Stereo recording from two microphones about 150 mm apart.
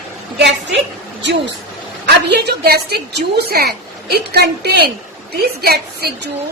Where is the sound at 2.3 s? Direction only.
90° right.